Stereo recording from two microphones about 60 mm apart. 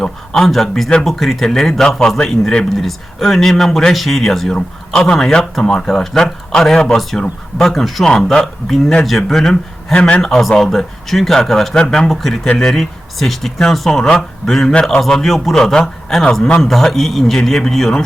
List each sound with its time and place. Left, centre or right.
0.0 s a man's voice: centre
9.9 s a man's voice: centre
10.2 s a man's voice: centre
15.0 s a man's voice: centre